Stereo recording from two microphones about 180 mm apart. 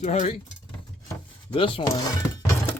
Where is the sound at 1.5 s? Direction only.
30° left (ahead or behind).